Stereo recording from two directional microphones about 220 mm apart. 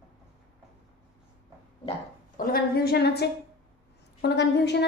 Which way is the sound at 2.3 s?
40° left (ahead or behind).